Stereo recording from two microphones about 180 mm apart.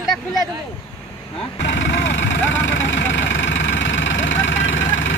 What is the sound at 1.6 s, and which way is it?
Vehicle, 85° left.